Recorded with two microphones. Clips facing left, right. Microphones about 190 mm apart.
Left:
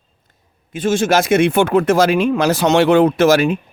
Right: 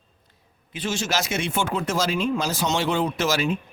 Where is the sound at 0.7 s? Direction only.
50° left (ahead or behind).